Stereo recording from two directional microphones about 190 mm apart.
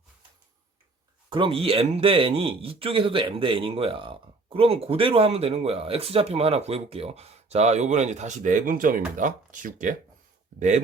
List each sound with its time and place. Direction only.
1.3 s speech: 25° right (ahead or behind); by 10.0 s 40° right (ahead or behind)